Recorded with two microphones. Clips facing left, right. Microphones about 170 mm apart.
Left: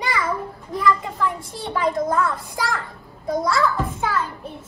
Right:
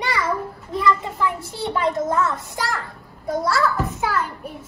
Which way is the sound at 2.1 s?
25° right (ahead or behind).